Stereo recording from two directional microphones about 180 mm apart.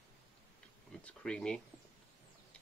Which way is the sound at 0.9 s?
5° left (ahead or behind).